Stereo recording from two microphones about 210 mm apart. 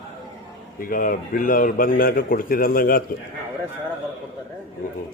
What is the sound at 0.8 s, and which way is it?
A man's voice, 40° left (ahead or behind).